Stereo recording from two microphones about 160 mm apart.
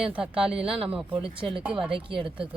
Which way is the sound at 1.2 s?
35° right (ahead or behind).